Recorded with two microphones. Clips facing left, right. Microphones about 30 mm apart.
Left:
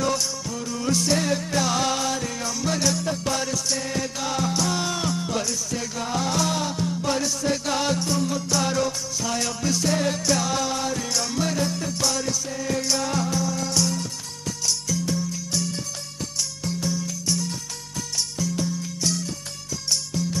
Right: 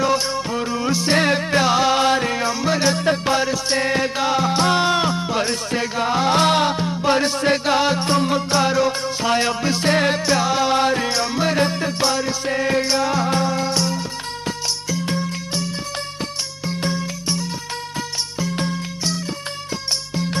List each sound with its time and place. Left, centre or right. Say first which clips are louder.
0.0 s music: right 6 dB; right
1.1 s music: right 6 dB; right
2.0 s music: right 9 dB; right
3.7 s music: right 8 dB; right
8.1 s music: right 6 dB; right
13.3 s music: right 6 dB; right
16.8 s music: right 4 dB; right
18.4 s music: right 4 dB; right